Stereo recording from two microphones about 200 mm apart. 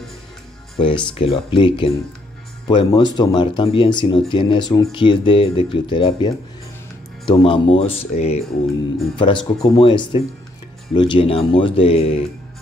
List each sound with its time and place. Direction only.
0.7 s speech: 25° left (ahead or behind)